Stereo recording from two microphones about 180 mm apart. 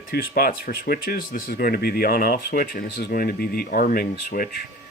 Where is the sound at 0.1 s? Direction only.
60° left (ahead or behind).